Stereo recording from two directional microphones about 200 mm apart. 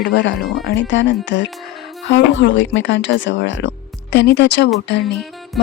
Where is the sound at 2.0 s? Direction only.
65° left (ahead or behind).